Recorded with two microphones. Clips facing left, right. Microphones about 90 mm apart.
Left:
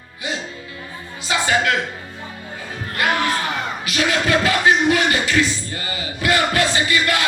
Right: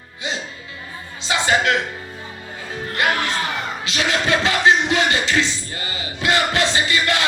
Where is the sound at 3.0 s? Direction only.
25° right (ahead or behind).